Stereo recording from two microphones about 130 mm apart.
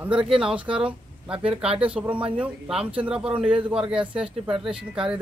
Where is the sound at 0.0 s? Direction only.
10° right (ahead or behind).